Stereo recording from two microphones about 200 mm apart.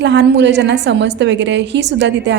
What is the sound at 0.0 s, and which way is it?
A woman's voice, 60° right (ahead or behind).